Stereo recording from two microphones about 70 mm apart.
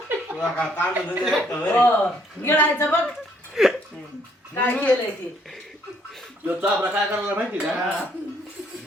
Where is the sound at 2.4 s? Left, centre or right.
Left.